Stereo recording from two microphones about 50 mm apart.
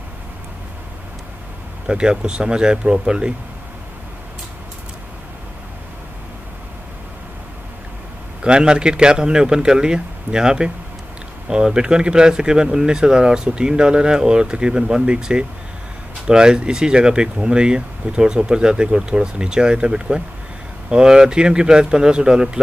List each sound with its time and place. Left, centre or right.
1.9 s speech: centre
8.4 s speech: centre